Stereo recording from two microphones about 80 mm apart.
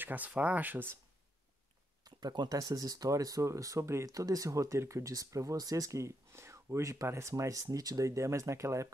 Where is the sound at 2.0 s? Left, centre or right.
Right.